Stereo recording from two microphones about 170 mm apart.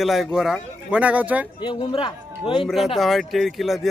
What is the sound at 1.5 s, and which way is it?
Speech, 30° left (ahead or behind).